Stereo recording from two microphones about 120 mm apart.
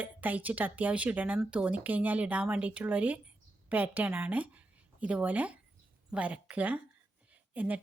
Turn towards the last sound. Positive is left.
turn(degrees=-15)  # may be behind; listen again after turning